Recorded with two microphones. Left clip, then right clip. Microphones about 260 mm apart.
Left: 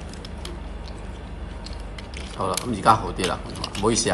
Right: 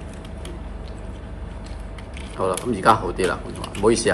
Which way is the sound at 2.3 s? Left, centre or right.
Left.